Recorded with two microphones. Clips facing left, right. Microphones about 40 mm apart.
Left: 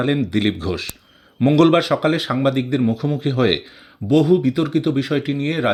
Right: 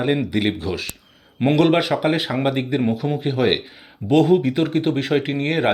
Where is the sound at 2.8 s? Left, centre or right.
Right.